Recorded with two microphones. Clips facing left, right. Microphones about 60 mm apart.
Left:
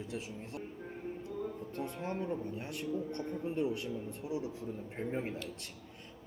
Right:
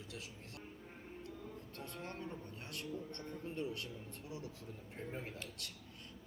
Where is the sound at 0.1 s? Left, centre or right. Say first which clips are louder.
Left 9 dB; left.